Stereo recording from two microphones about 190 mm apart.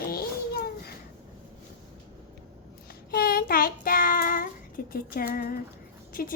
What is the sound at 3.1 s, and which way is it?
Child singing, 50° left (ahead or behind).